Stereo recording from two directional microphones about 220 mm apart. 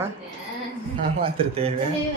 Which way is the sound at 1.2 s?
25° right (ahead or behind).